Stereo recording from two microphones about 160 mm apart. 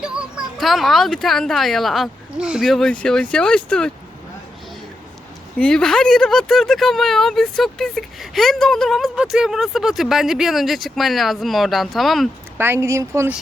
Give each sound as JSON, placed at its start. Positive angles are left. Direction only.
{"t": 0.0, "sound": "a child's voice", "side_deg": -5}
{"t": 5.5, "sound": "speech", "side_deg": 5}
{"t": 12.5, "sound": "speech", "side_deg": -15}